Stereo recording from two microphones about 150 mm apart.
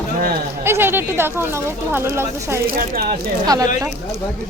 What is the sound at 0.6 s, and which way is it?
Speech, 15° right (ahead or behind).